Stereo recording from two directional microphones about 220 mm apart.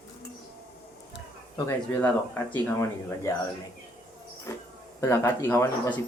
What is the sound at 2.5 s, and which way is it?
Speech, 10° left (ahead or behind).